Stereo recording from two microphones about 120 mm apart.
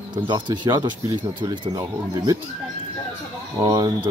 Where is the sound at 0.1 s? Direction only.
40° right (ahead or behind).